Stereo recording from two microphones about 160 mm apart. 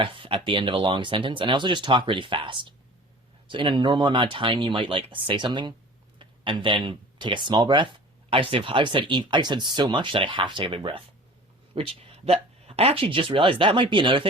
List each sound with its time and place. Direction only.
0.0 s speech: 35° right (ahead or behind)